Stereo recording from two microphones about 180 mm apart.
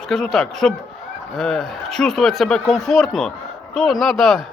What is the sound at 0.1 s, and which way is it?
Speech, centre (ahead or behind).